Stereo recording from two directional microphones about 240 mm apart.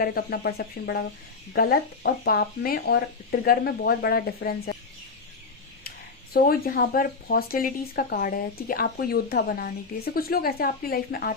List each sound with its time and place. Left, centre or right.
0.0 s speech: left
6.3 s speech: left